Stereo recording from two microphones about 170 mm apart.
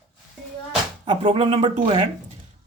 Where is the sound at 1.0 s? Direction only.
30° right (ahead or behind).